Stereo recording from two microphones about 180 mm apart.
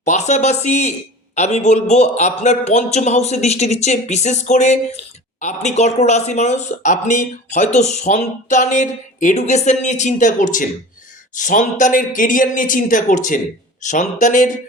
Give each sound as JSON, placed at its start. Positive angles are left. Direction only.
{"t": 0.0, "sound": "a man's voice", "side_deg": 40}